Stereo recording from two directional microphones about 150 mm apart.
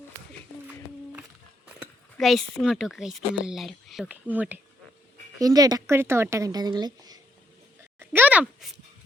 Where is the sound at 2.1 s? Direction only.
Centre (ahead or behind).